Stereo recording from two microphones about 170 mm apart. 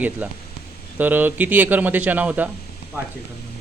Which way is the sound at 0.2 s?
10° right (ahead or behind).